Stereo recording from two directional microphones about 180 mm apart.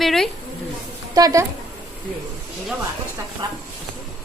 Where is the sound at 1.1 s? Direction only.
20° right (ahead or behind).